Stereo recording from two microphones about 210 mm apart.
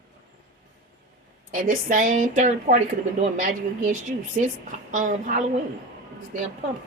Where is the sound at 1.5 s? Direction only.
40° right (ahead or behind).